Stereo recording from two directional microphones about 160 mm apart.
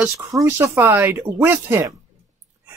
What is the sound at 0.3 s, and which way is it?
Speech, 15° right (ahead or behind).